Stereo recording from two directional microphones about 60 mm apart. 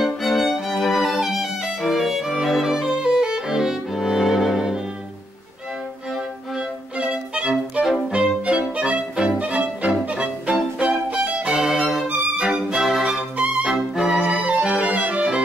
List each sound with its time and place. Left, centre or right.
0.0 s violin: centre
7.0 s violin: centre
8.5 s music: centre
10.9 s violin: centre
13.7 s music: centre